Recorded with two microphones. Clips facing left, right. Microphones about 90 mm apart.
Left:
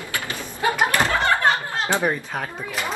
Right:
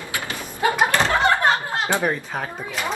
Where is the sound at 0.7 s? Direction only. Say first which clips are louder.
Right 1 dB; 20° right (ahead or behind).